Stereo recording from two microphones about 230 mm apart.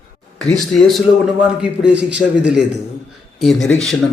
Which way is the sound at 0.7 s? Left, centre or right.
Centre.